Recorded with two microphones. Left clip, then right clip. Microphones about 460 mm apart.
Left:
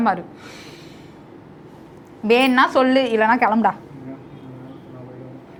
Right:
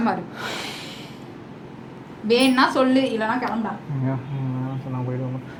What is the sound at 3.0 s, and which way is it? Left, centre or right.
Speech, left.